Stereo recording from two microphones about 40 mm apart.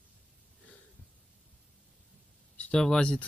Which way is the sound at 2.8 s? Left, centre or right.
Centre.